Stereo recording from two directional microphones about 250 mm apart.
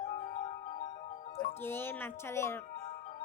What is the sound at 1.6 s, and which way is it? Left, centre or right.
Music, centre.